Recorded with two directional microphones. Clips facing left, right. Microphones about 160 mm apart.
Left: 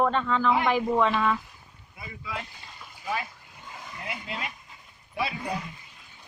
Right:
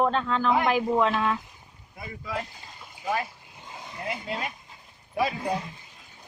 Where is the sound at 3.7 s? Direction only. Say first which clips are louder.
Right 4 dB; 30° right (ahead or behind).